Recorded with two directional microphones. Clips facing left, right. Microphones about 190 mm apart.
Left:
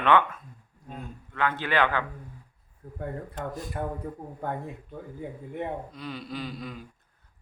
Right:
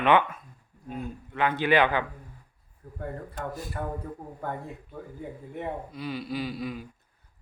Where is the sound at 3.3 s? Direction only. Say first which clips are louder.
Even; 5° right (ahead or behind).